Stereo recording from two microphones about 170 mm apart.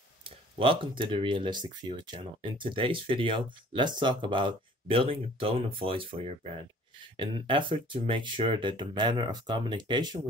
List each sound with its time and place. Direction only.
0.2 s speech: 30° right (ahead or behind)